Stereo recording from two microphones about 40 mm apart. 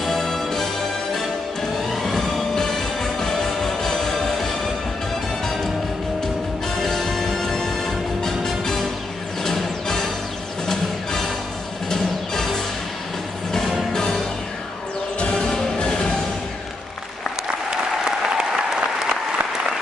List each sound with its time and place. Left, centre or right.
0.0 s music: centre
6.8 s music: centre
13.9 s music: centre
18.4 s applause: centre